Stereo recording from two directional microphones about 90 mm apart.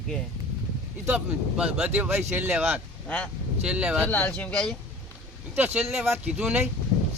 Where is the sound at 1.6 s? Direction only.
15° right (ahead or behind).